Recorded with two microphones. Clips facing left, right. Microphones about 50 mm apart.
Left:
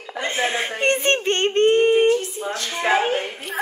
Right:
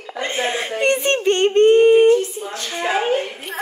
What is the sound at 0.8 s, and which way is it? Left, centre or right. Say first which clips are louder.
Speech: right 2 dB; left.